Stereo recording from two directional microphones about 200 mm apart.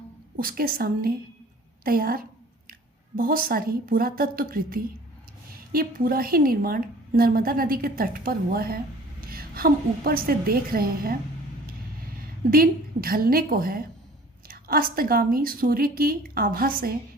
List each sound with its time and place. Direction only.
0.3 s a woman's voice: 45° right (ahead or behind)
12.5 s a woman's voice: 45° right (ahead or behind)